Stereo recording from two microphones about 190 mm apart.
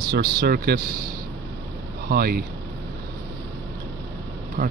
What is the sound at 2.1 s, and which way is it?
Speech, 55° right (ahead or behind).